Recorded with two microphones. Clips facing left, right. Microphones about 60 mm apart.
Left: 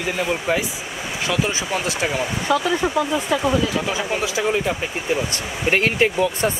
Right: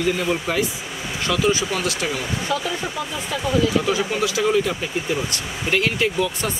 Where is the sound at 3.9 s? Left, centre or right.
Left.